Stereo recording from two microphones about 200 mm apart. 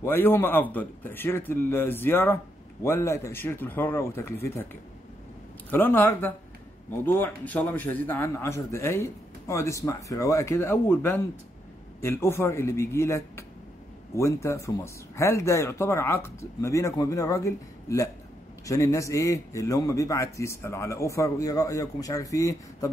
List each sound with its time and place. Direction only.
0.0 s a man's voice: 10° left (ahead or behind)
5.7 s a man's voice: 10° left (ahead or behind)